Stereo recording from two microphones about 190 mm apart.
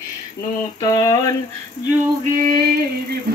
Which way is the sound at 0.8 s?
20° left (ahead or behind).